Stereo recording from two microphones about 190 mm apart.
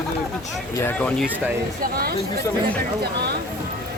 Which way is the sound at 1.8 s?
55° right (ahead or behind).